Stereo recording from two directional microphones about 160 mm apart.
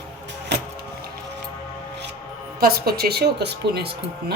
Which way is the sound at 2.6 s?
75° right (ahead or behind).